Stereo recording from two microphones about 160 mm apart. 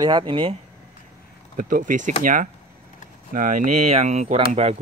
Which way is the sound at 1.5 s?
55° right (ahead or behind).